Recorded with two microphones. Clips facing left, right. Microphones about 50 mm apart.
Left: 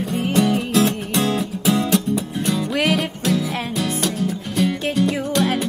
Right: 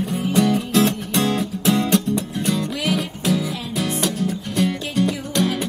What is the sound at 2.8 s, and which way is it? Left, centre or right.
Music, left.